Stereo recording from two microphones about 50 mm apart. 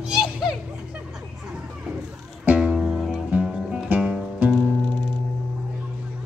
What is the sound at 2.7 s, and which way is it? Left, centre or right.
Music, centre.